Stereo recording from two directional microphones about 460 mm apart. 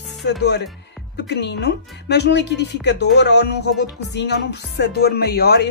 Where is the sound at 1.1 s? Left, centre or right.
Left.